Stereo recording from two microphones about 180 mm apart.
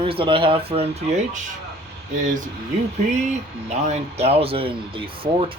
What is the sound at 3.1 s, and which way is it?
Speech, 40° right (ahead or behind).